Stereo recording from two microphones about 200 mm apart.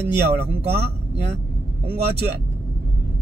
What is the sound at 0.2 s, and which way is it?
Speech, 55° right (ahead or behind).